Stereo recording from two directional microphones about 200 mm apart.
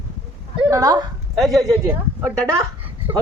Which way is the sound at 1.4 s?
Centre (ahead or behind).